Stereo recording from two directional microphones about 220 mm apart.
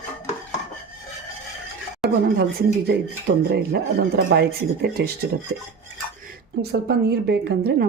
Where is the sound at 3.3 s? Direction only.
45° right (ahead or behind).